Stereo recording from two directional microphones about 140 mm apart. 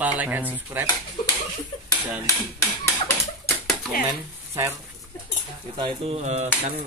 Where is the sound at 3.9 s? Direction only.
90° left.